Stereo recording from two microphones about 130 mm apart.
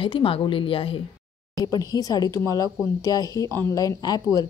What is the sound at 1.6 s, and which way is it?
A woman's voice, 30° left (ahead or behind).